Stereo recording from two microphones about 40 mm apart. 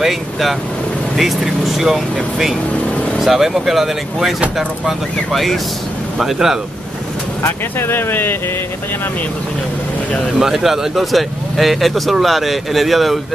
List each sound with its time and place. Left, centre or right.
0.0 s speech: centre
5.3 s speech: centre
6.3 s speech: centre
7.4 s speech: left
10.4 s speech: centre